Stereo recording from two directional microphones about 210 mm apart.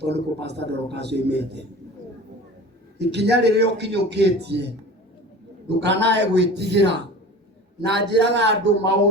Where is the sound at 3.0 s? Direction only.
55° right (ahead or behind).